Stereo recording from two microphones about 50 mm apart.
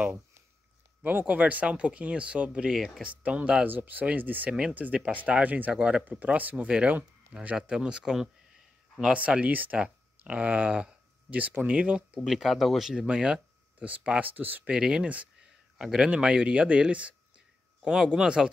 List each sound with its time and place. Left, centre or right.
1.0 s speech: right
2.7 s speech: centre
3.0 s speech: right
3.6 s speech: right
4.5 s speech: centre
4.7 s speech: right
6.0 s speech: right
7.5 s speech: centre
9.5 s speech: right
9.8 s speech: right
12.3 s speech: centre
13.0 s speech: centre; by 14.7 s right
14.7 s speech: centre